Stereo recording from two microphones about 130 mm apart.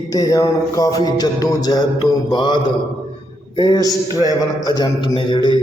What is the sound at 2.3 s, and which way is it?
A man's voice, 35° left (ahead or behind).